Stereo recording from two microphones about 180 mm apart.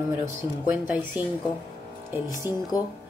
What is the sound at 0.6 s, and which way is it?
Speech, 10° right (ahead or behind).